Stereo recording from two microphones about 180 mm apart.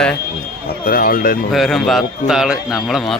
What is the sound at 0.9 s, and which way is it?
Speech, 50° left (ahead or behind).